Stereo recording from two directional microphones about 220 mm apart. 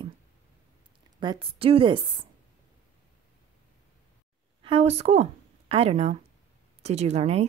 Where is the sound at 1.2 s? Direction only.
20° right (ahead or behind).